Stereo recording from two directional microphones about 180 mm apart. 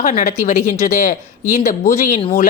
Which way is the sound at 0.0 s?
50° left (ahead or behind).